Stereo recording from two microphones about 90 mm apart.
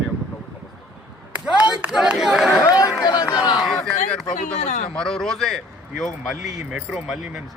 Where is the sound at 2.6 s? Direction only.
45° left (ahead or behind).